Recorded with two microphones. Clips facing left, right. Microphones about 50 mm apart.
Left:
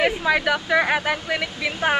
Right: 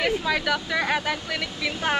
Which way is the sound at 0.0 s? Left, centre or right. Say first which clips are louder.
Left 4 dB; centre.